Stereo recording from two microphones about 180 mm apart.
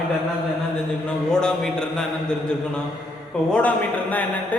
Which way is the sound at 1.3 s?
5° left (ahead or behind).